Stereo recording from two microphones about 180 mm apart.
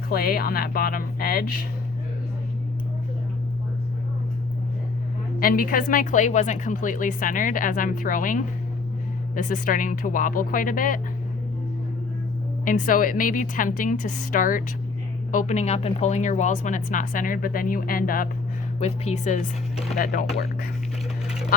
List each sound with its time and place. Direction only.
0.1 s speech: 55° left (ahead or behind)
5.4 s a woman's voice: 55° left (ahead or behind)
12.6 s a woman's voice: 50° left (ahead or behind)
18.8 s speech: 35° left (ahead or behind); by 20.2 s 50° left (ahead or behind)